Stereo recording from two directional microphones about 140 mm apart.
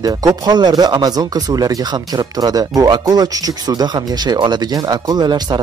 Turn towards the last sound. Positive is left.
turn(degrees=-30)  # may be behind; listen again after turning